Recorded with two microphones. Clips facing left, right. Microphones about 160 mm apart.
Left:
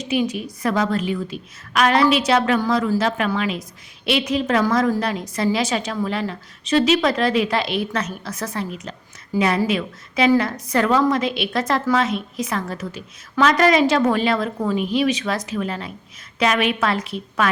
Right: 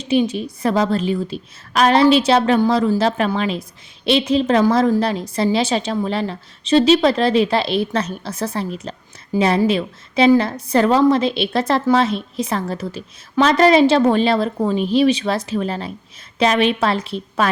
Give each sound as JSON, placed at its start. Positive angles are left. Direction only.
{"t": 0.0, "sound": "a woman's voice", "side_deg": -30}